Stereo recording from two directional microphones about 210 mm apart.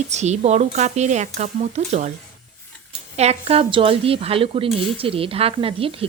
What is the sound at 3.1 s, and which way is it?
A woman's voice, 30° right (ahead or behind).